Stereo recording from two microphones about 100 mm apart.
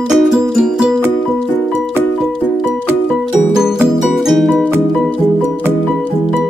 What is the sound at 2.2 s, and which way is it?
Music, 5° right (ahead or behind).